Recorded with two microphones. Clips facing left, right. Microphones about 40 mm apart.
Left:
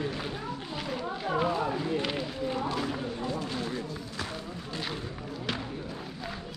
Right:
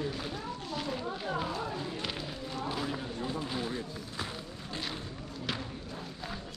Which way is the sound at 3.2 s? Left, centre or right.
Centre.